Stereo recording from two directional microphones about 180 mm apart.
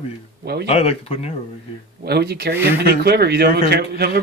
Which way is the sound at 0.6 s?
35° left (ahead or behind).